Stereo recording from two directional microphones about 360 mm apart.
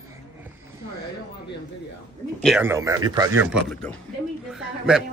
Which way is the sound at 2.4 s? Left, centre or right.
Centre.